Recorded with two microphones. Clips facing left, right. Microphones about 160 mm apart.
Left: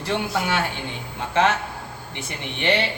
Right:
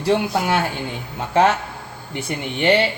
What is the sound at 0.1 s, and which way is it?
Speech, 40° right (ahead or behind).